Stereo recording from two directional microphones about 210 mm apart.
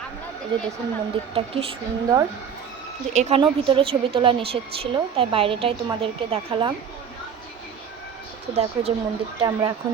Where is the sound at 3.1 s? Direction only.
30° right (ahead or behind).